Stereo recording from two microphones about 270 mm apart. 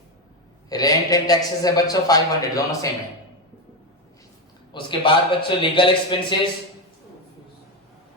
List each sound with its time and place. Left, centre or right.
0.7 s a man's voice: centre
4.7 s a man's voice: centre